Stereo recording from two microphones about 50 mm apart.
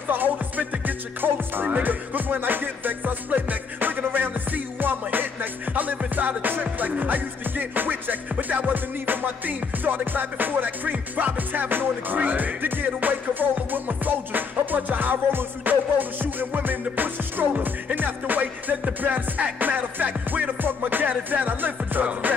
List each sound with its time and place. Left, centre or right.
0.1 s music: right